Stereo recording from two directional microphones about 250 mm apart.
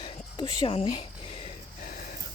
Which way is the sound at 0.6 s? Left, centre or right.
Left.